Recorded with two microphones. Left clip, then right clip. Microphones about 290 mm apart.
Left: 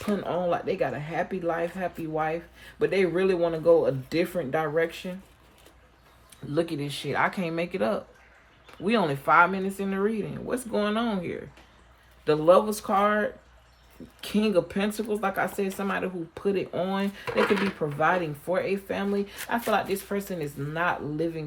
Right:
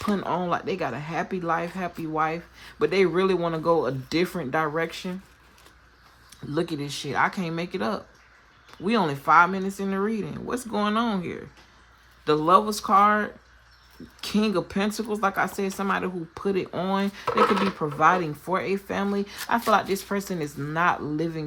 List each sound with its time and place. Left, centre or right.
0.1 s speech: right
6.5 s speech: centre